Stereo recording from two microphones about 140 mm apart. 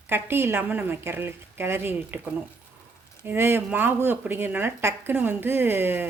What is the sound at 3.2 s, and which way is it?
A woman's voice, 15° right (ahead or behind).